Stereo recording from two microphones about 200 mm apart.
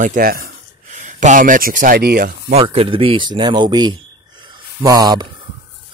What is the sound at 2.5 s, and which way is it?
Speech, 30° right (ahead or behind).